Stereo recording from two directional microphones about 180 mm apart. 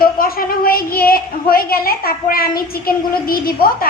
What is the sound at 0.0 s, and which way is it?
A woman's voice, 55° left (ahead or behind).